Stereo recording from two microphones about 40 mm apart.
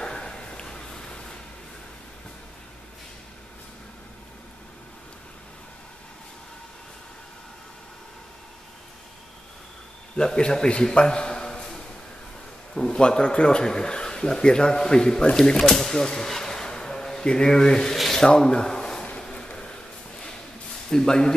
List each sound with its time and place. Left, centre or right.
0.0 s a sound: left
10.1 s a man's voice: left
17.9 s rub: centre
18.2 s a man's voice: centre
19.2 s a sound: left
20.9 s speech: centre